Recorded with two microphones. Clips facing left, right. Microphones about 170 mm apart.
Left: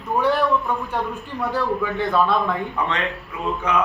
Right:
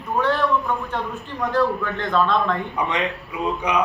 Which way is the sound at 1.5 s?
10° left (ahead or behind).